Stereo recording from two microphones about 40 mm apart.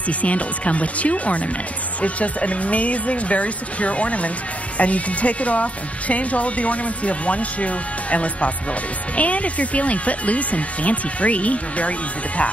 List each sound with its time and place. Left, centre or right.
0.2 s speech: left